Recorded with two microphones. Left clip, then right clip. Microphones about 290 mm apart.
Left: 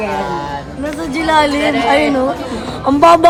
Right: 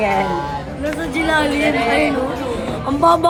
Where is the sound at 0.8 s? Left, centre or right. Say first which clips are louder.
Left 2 dB; left.